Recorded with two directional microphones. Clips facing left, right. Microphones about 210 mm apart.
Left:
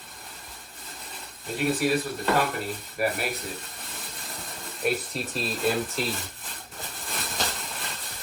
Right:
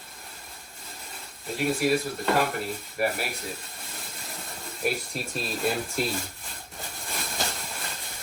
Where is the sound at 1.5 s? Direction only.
Centre (ahead or behind).